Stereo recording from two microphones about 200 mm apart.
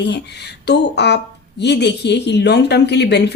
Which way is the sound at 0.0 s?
60° left (ahead or behind).